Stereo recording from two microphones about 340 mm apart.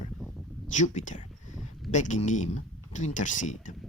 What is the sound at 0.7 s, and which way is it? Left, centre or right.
Speech, left.